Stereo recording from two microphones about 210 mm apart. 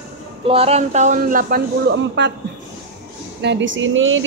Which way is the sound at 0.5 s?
30° right (ahead or behind).